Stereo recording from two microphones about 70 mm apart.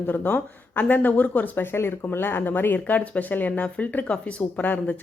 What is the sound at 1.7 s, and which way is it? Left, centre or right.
A woman's voice, left.